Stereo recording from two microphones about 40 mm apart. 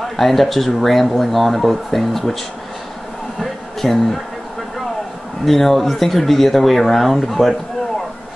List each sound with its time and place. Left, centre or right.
0.0 s speech: centre
3.3 s a sound: centre
5.4 s speech: centre